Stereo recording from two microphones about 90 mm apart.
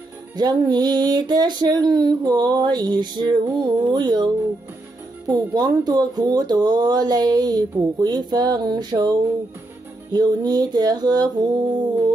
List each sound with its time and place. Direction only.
0.4 s speech: 50° right (ahead or behind)
10.1 s speech: 50° right (ahead or behind)